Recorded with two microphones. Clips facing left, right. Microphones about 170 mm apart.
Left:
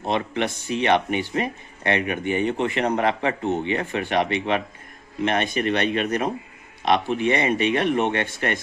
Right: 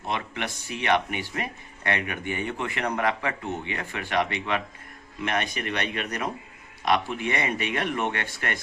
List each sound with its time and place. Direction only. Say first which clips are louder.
0.0 s speech: left 7 dB; 25° left (ahead or behind)